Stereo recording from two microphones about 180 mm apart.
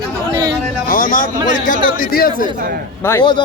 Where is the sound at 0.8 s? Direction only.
50° left (ahead or behind).